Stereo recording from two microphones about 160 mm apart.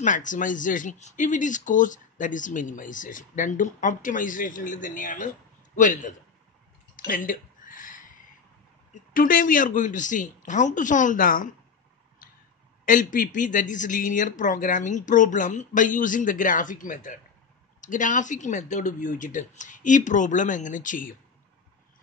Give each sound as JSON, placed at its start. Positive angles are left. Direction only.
{"t": 0.0, "sound": "speech", "side_deg": 50}
{"t": 7.1, "sound": "a sound", "side_deg": 60}
{"t": 8.9, "sound": "speech", "side_deg": 60}
{"t": 12.8, "sound": "speech", "side_deg": 55}